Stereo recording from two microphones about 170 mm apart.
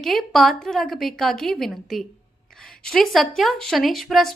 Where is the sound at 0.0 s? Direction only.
Centre (ahead or behind).